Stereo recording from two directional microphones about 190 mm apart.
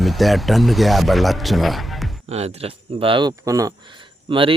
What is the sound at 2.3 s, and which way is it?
Speech, 35° right (ahead or behind).